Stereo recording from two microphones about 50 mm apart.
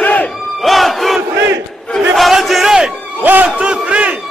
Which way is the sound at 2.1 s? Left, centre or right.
Centre.